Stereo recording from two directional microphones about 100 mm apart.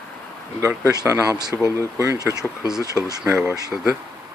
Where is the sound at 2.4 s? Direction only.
5° right (ahead or behind).